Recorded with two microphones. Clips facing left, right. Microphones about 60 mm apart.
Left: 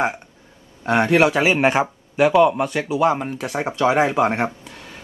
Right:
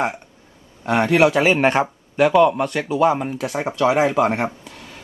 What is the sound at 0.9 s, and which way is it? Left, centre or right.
Speech, centre.